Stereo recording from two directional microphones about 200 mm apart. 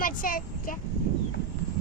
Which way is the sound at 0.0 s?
45° left (ahead or behind).